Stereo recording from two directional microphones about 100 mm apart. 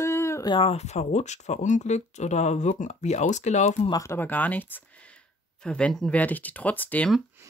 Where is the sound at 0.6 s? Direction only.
90° left.